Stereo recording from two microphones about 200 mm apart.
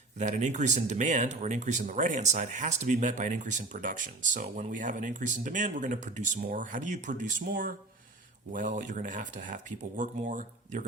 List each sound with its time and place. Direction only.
0.2 s speech: 35° right (ahead or behind)